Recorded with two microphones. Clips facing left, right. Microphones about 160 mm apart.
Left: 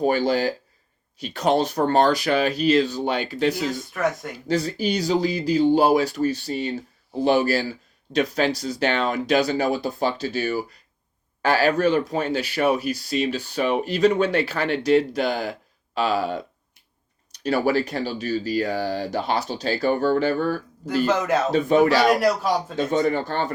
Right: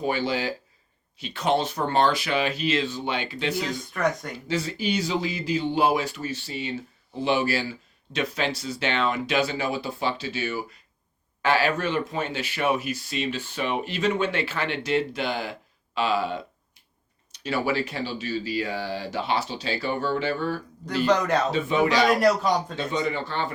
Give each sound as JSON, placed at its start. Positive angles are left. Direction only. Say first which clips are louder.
{"t": 0.0, "sound": "speech", "louder": "left 6 dB", "side_deg": 45}
{"t": 3.9, "sound": "a man's voice", "louder": "right 1 dB", "side_deg": 0}
{"t": 4.4, "sound": "speech", "louder": "left 4 dB", "side_deg": 40}
{"t": 17.4, "sound": "speech", "louder": "left 5 dB", "side_deg": 40}
{"t": 21.0, "sound": "a man's voice", "louder": "even", "side_deg": 5}
{"t": 21.5, "sound": "speech", "louder": "left 5 dB", "side_deg": 45}
{"t": 22.2, "sound": "a man's voice", "louder": "even", "side_deg": 5}
{"t": 22.7, "sound": "speech", "louder": "left 6 dB", "side_deg": 45}